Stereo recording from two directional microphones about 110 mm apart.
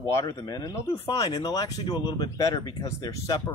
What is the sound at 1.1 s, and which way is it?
Speech, 40° left (ahead or behind).